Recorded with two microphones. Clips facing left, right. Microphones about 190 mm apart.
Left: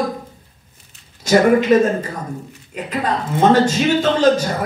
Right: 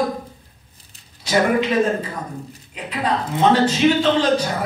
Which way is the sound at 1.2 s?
45° left (ahead or behind).